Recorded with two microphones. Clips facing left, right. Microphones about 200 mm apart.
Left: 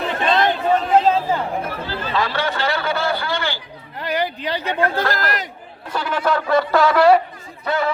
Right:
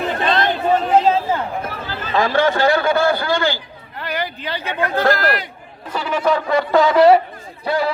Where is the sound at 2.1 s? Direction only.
50° right (ahead or behind).